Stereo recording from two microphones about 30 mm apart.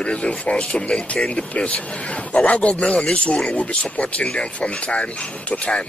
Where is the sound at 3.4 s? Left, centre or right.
Left.